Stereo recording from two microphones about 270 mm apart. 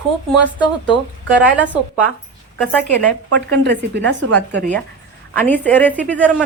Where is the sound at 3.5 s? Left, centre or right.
Right.